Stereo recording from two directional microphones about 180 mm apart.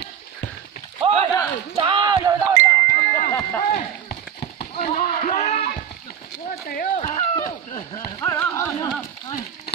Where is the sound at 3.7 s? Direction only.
60° left (ahead or behind).